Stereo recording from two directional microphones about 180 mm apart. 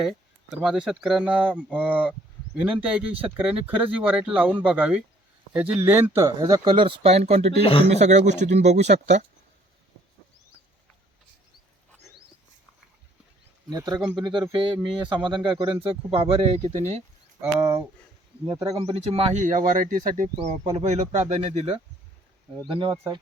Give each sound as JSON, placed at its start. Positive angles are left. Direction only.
{"t": 0.5, "sound": "speech", "side_deg": 0}
{"t": 7.6, "sound": "speech", "side_deg": 30}
{"t": 7.9, "sound": "speech", "side_deg": -40}
{"t": 13.7, "sound": "speech", "side_deg": -20}
{"t": 14.0, "sound": "speech", "side_deg": -5}
{"t": 14.5, "sound": "speech", "side_deg": -25}
{"t": 17.4, "sound": "speech", "side_deg": -15}
{"t": 18.6, "sound": "speech", "side_deg": -35}